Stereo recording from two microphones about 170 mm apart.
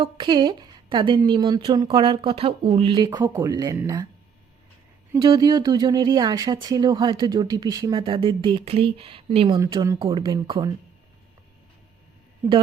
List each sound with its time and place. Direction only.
0.0 s speech: 30° right (ahead or behind)
5.1 s speech: 25° right (ahead or behind)
9.6 s speech: 20° right (ahead or behind)